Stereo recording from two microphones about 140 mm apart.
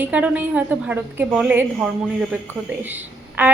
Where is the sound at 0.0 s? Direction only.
10° right (ahead or behind).